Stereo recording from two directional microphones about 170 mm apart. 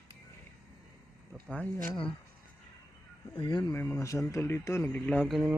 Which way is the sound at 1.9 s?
30° left (ahead or behind).